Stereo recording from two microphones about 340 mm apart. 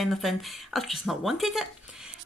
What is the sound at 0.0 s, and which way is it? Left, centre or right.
Speech, centre.